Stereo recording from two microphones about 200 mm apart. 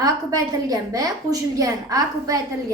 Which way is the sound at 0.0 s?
20° right (ahead or behind).